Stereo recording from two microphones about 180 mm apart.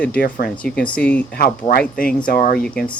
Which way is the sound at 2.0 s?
50° left (ahead or behind).